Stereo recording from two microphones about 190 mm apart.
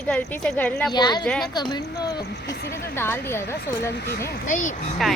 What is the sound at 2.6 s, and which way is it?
Speech, 55° left (ahead or behind).